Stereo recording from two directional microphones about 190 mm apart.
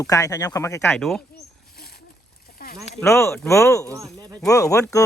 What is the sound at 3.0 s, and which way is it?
Speech, 15° left (ahead or behind).